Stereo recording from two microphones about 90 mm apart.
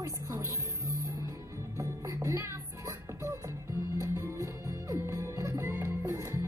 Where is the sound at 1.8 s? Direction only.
35° right (ahead or behind).